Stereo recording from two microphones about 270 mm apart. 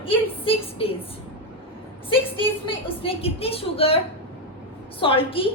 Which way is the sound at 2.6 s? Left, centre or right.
Centre.